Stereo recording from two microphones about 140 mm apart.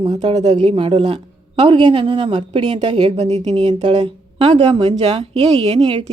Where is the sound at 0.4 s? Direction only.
50° right (ahead or behind).